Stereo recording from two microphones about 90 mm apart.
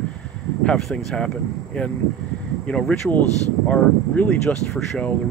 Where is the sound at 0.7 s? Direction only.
5° left (ahead or behind).